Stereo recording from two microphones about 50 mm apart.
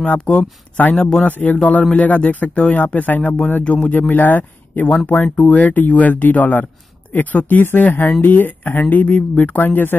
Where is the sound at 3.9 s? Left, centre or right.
Left.